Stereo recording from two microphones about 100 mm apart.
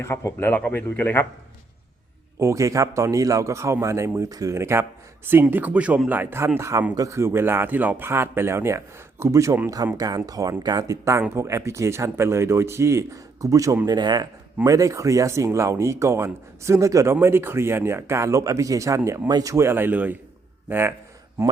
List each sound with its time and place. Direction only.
0.0 s speech: 25° left (ahead or behind)
2.4 s a man's voice: 30° right (ahead or behind)
13.8 s a man's voice: 45° right (ahead or behind); by 20.9 s 25° right (ahead or behind)